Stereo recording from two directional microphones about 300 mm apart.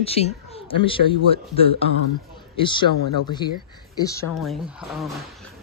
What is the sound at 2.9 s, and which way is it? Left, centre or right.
Speech, left.